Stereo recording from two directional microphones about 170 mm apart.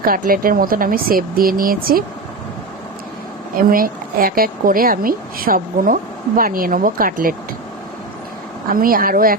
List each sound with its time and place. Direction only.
0.0 s speech: 55° right (ahead or behind)
3.5 s speech: 55° right (ahead or behind)
8.7 s speech: 55° right (ahead or behind)